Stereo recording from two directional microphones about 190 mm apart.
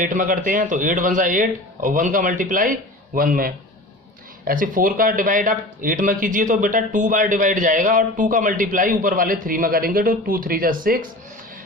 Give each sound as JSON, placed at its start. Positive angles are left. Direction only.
{"t": 0.0, "sound": "speech", "side_deg": -45}